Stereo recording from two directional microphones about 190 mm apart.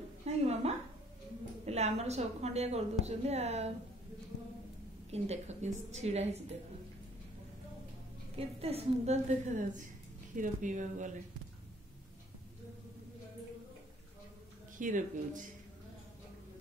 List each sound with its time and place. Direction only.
0.2 s a sound: 35° right (ahead or behind)
1.7 s a woman's voice: 35° right (ahead or behind)
5.1 s a woman's voice: 35° right (ahead or behind)
8.4 s a woman's voice: 30° right (ahead or behind)
14.8 s speech: 45° right (ahead or behind)